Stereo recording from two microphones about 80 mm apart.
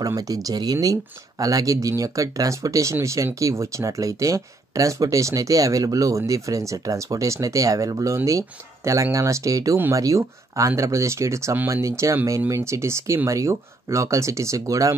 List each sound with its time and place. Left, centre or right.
0.0 s speech: right